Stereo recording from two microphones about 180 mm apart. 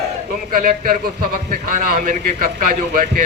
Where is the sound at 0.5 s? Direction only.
50° right (ahead or behind).